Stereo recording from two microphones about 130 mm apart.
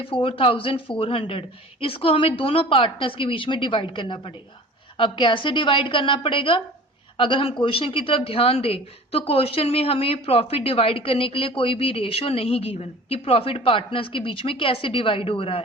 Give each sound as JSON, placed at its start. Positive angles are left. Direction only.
{"t": 0.0, "sound": "a woman's voice", "side_deg": 45}